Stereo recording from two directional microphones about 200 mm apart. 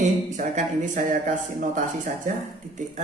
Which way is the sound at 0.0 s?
40° right (ahead or behind).